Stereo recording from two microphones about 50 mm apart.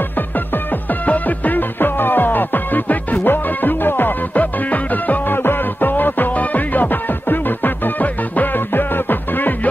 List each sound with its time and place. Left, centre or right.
1.0 s music: left
4.4 s music: left